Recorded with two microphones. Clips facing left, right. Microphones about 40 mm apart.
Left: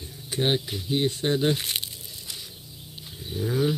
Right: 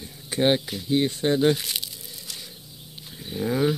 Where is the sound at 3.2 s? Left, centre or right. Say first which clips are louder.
Right 2 dB; right.